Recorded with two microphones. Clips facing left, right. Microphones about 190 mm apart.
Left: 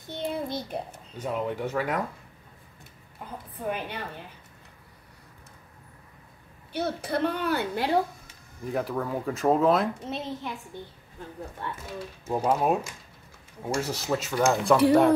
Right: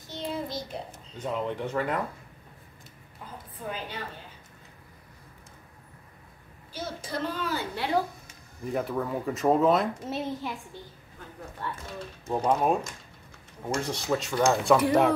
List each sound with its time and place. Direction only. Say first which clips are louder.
0.0 s a child's voice: left 2 dB; 55° left (ahead or behind)
1.1 s speech: left 1 dB; 10° left (ahead or behind)
6.7 s a child's voice: left 6 dB; 65° left (ahead or behind)
8.6 s speech: even; centre (ahead or behind)
10.7 s a woman's voice: left 4 dB; 50° left (ahead or behind)
11.8 s speech: left 2 dB; 5° left (ahead or behind)